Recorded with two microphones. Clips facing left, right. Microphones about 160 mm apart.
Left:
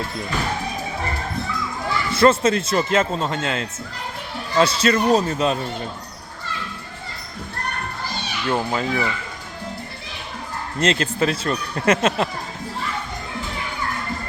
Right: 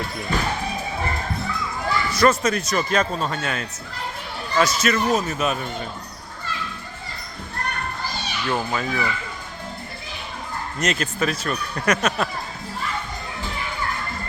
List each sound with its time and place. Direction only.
2.1 s speech: 25° left (ahead or behind)
8.4 s speech: 25° left (ahead or behind)
10.8 s speech: 30° left (ahead or behind)